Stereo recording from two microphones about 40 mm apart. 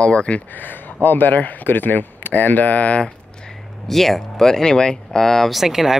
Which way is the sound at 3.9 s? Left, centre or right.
Centre.